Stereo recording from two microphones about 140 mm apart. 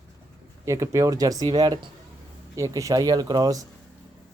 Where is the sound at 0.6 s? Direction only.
20° right (ahead or behind).